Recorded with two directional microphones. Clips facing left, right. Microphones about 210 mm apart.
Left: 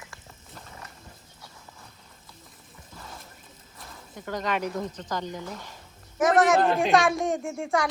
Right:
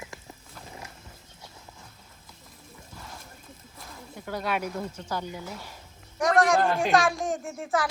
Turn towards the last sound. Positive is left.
turn(degrees=0)  # may be behind; listen again after turning